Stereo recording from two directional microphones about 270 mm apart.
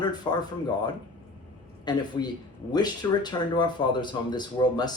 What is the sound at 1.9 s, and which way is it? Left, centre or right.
Speech, centre.